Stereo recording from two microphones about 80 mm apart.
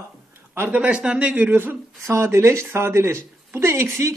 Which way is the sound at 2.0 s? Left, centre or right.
Right.